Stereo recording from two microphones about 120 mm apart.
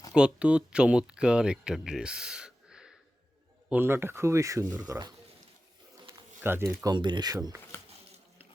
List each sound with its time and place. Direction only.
0.1 s speech: 10° right (ahead or behind)
3.7 s speech: 15° right (ahead or behind); by 5.1 s 35° right (ahead or behind)
6.1 s a sound: 20° right (ahead or behind)
6.9 s speech: 40° right (ahead or behind)
7.3 s speech: 25° right (ahead or behind)